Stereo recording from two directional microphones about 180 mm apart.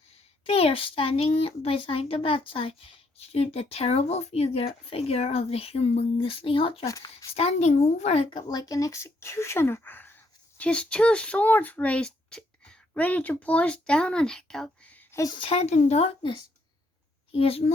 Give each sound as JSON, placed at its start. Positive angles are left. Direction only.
{"t": 0.4, "sound": "a child's voice", "side_deg": 30}
{"t": 6.8, "sound": "speech", "side_deg": 15}
{"t": 7.3, "sound": "a child's voice", "side_deg": 35}